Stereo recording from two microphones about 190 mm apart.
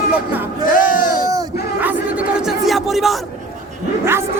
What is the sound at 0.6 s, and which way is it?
Music, 45° left (ahead or behind).